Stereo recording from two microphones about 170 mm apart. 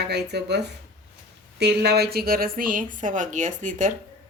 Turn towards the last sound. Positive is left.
turn(degrees=-45)  # may be behind; listen again after turning